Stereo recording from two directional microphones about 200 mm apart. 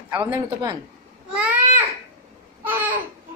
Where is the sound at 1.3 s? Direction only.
5° right (ahead or behind).